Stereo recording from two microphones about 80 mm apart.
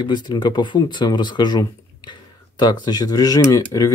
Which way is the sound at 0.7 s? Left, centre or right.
Left.